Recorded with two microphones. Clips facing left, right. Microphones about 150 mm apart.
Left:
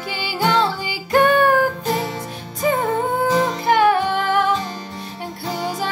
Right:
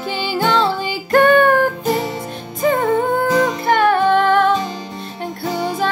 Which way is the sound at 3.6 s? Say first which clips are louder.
Right 1 dB; 10° left (ahead or behind).